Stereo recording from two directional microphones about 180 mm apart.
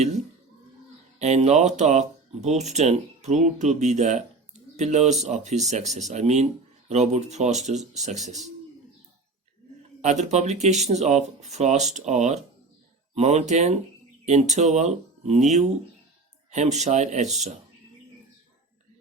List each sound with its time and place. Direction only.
1.2 s speech: 40° right (ahead or behind)
10.0 s speech: 40° right (ahead or behind)